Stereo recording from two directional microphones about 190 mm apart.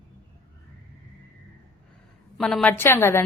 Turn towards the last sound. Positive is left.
turn(degrees=15)  # may be behind; listen again after turning